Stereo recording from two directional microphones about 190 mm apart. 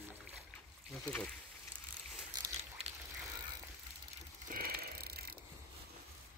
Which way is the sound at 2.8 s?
35° right (ahead or behind).